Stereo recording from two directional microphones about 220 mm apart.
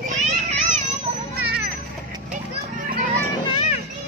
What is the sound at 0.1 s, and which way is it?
Children playing, 30° right (ahead or behind).